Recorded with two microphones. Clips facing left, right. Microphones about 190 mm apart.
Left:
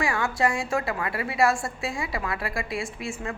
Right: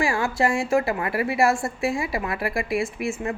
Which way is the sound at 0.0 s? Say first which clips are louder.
Right 3 dB; 25° right (ahead or behind).